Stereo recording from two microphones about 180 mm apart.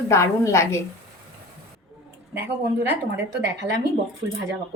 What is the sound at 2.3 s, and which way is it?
Speech, 15° right (ahead or behind).